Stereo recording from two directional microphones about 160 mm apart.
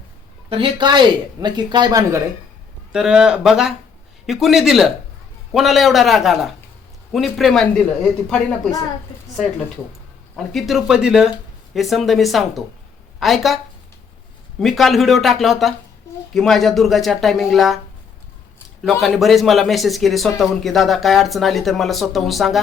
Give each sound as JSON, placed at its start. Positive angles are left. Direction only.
{"t": 0.5, "sound": "speech", "side_deg": -30}
{"t": 2.9, "sound": "a man's voice", "side_deg": -5}
{"t": 10.3, "sound": "a man's voice", "side_deg": 0}
{"t": 14.6, "sound": "a man's voice", "side_deg": 0}
{"t": 18.8, "sound": "a man's voice", "side_deg": 0}